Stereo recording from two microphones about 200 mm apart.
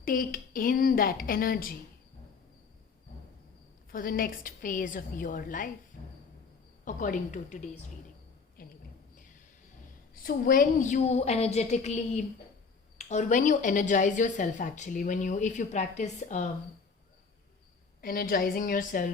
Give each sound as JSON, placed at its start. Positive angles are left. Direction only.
{"t": 0.0, "sound": "a woman's voice", "side_deg": 45}
{"t": 3.9, "sound": "a woman's voice", "side_deg": 45}
{"t": 6.8, "sound": "a woman's voice", "side_deg": 40}
{"t": 10.2, "sound": "a woman's voice", "side_deg": 45}
{"t": 18.0, "sound": "a woman's voice", "side_deg": 45}